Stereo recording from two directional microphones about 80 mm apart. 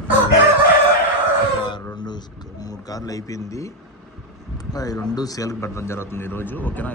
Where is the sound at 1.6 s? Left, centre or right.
Left.